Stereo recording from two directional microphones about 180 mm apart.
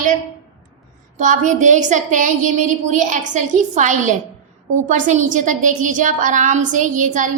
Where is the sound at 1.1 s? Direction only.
45° right (ahead or behind).